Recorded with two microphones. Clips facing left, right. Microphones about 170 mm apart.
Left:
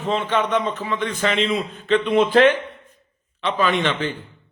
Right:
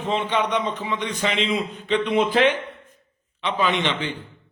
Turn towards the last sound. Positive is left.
turn(degrees=-15)  # may be behind; listen again after turning